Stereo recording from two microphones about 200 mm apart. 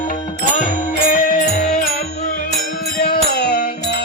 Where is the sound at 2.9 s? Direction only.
50° left (ahead or behind).